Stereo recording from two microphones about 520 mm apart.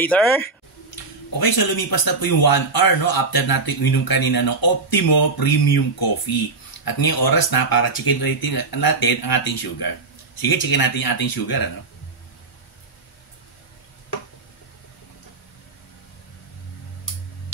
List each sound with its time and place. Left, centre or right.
0.0 s speech: centre
1.4 s a man's voice: left